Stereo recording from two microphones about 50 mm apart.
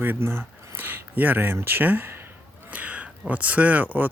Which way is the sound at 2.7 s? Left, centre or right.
Right.